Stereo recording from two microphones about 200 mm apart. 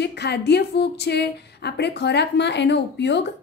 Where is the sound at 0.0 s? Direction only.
55° left (ahead or behind).